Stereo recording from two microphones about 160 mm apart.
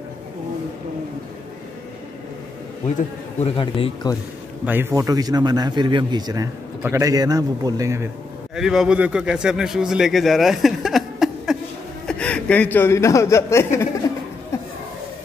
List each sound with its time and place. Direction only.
3.3 s a man's voice: 35° left (ahead or behind)
4.6 s a man's voice: 15° right (ahead or behind)
8.5 s a man's voice: 5° right (ahead or behind); by 13.8 s 15° left (ahead or behind)
14.0 s laughter: 20° left (ahead or behind)
14.5 s a sound: 15° left (ahead or behind)